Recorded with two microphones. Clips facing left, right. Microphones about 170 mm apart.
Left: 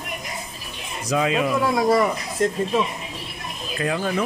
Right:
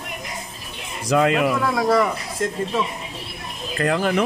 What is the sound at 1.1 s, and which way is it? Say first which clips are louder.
Speech: right 3 dB; 60° right (ahead or behind).